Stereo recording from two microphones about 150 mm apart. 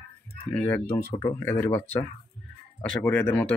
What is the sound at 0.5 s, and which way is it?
Speech, 10° left (ahead or behind).